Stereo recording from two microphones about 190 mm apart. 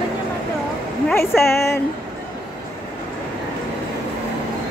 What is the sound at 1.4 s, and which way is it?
Speech, 15° left (ahead or behind).